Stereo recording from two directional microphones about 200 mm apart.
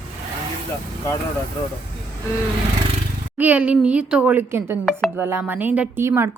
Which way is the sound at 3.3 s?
10° right (ahead or behind).